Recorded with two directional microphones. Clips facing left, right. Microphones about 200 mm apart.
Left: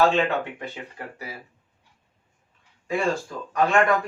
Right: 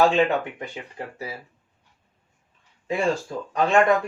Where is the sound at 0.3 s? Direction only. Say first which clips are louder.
Right 2 dB; 15° right (ahead or behind).